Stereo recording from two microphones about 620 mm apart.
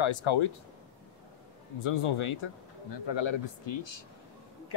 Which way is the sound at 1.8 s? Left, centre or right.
Left.